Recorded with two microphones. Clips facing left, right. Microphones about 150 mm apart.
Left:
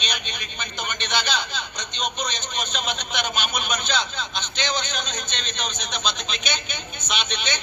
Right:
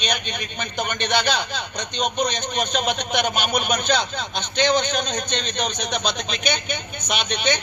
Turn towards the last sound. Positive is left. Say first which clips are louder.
# right 6 dB
turn(degrees=-55)  # may be behind; listen again after turning